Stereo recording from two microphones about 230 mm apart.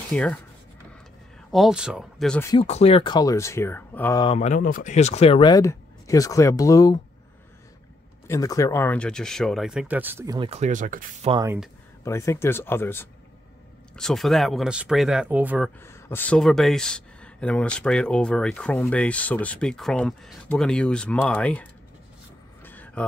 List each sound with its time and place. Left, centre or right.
0.1 s speech: centre
1.5 s speech: centre
2.5 s speech: left; by 4.2 s centre
4.2 s speech: left
8.3 s speech: centre; by 11.3 s right
11.3 s speech: centre
12.0 s speech: centre
15.8 s speech: centre
22.6 s vehicle: centre